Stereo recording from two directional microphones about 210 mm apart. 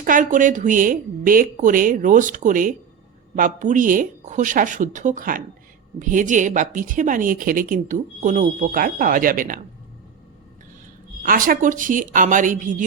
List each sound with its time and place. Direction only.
0.0 s speech: 40° right (ahead or behind)
11.2 s speech: 40° right (ahead or behind)